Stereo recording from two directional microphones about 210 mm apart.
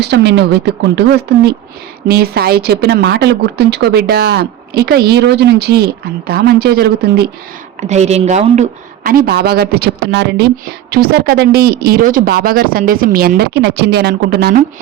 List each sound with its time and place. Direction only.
0.0 s a woman's voice: 55° right (ahead or behind)
7.8 s a woman's voice: 30° right (ahead or behind); by 14.6 s 50° right (ahead or behind)